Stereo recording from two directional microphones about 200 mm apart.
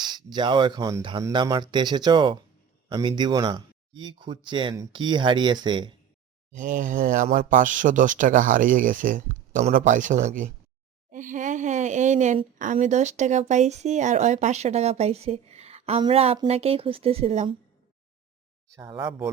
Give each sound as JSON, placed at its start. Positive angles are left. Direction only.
{"t": 0.1, "sound": "speech", "side_deg": -20}
{"t": 6.5, "sound": "speech", "side_deg": -40}
{"t": 18.8, "sound": "speech", "side_deg": -15}